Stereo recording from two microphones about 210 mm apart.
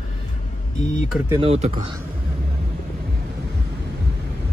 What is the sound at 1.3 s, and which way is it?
Speech, 25° right (ahead or behind).